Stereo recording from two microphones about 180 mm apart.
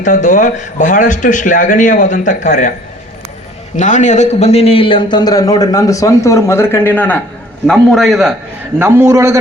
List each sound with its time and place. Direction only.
0.0 s a man's voice: 45° left (ahead or behind)
3.8 s a man's voice: 45° left (ahead or behind); by 8.3 s centre (ahead or behind)
8.8 s a man's voice: 15° right (ahead or behind)